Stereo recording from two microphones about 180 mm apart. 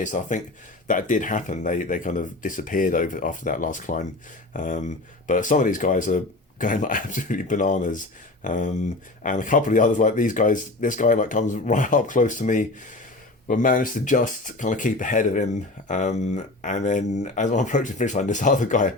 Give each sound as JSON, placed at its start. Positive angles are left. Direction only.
{"t": 0.0, "sound": "speech", "side_deg": 45}